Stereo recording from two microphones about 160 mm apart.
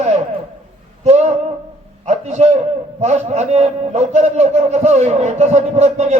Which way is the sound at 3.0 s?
45° right (ahead or behind).